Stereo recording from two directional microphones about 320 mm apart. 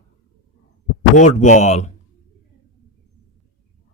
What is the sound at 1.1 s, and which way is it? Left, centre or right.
Speech, left.